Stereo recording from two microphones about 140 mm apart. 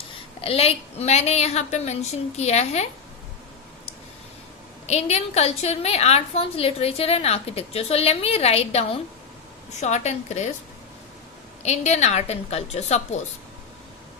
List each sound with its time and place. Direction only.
0.4 s a woman's voice: 45° left (ahead or behind)
4.9 s a woman's voice: 50° left (ahead or behind)
11.6 s a woman's voice: 55° left (ahead or behind)